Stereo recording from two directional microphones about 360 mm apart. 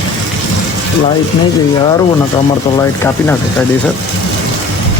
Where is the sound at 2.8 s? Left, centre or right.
Centre.